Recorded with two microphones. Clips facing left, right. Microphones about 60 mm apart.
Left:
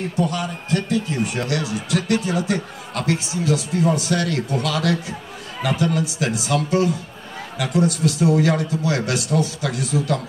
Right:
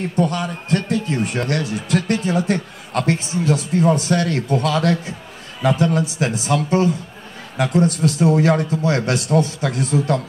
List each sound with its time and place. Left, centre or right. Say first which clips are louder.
0.1 s a man's voice: right 3 dB; right